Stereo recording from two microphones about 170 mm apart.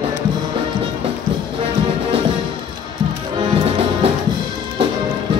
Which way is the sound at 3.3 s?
35° right (ahead or behind).